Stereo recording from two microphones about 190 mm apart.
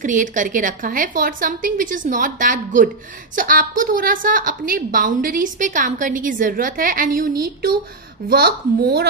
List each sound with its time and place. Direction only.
0.0 s a woman's voice: 40° right (ahead or behind)
8.3 s a woman's voice: 50° right (ahead or behind)